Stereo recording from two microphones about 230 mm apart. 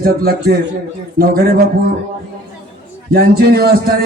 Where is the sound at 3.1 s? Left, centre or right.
Right.